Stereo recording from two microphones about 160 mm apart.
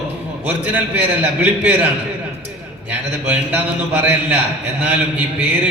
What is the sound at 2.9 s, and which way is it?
A man's voice, 10° right (ahead or behind).